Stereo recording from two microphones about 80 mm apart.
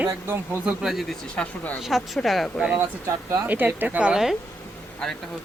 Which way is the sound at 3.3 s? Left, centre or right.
Right.